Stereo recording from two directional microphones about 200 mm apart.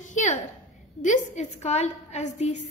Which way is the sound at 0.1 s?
35° left (ahead or behind).